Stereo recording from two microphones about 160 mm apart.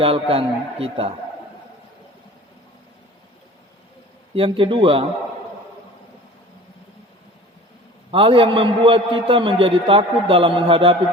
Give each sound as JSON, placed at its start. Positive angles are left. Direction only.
{"t": 0.0, "sound": "a man's voice", "side_deg": -35}
{"t": 4.4, "sound": "a man's voice", "side_deg": -35}
{"t": 8.1, "sound": "a man's voice", "side_deg": -35}